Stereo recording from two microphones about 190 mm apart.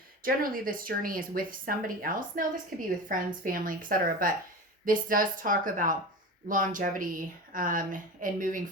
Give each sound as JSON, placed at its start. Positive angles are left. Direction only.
{"t": 0.2, "sound": "speech", "side_deg": -50}
{"t": 2.7, "sound": "a woman's voice", "side_deg": 0}
{"t": 3.1, "sound": "speech", "side_deg": -45}